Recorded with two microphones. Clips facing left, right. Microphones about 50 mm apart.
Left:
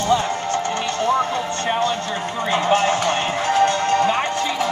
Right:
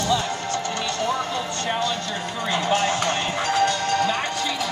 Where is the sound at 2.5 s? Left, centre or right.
Left.